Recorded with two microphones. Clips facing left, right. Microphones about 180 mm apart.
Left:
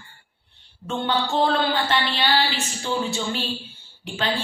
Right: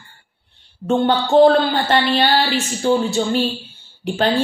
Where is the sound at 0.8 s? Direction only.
50° right (ahead or behind).